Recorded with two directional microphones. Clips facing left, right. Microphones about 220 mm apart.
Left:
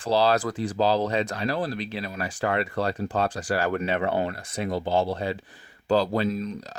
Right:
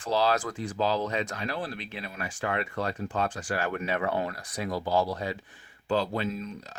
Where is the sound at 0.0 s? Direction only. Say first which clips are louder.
Left 4 dB; 35° left (ahead or behind).